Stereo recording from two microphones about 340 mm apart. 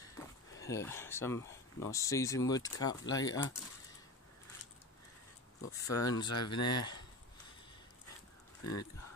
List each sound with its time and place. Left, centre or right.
0.0 s speech: centre
5.6 s speech: left